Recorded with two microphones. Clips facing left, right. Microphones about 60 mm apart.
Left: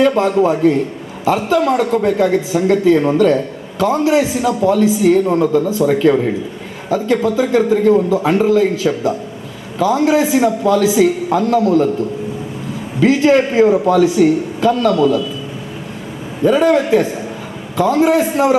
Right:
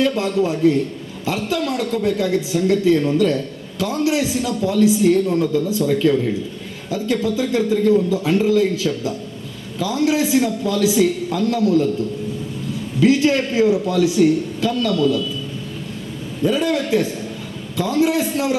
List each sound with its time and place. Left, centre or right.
0.0 s a man's voice: left
13.0 s a man's voice: left
16.4 s a man's voice: left